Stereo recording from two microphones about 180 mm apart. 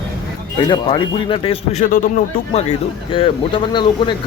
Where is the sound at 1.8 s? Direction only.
50° left (ahead or behind).